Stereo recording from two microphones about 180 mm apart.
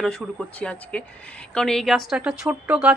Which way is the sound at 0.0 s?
Centre (ahead or behind).